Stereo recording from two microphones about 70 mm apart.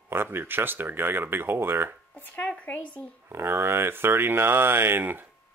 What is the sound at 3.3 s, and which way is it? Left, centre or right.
Speech, right.